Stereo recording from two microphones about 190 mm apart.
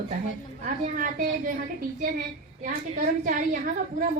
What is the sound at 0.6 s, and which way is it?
Speech, 45° right (ahead or behind).